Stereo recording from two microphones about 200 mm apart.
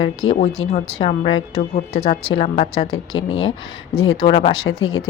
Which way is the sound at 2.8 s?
90° left.